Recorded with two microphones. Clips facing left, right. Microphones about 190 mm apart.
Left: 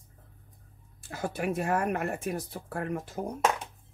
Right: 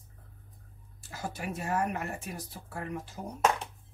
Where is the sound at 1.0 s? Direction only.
55° left (ahead or behind).